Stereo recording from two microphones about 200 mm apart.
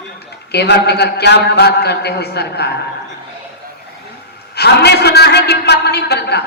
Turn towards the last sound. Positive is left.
turn(degrees=55)  # may be behind; listen again after turning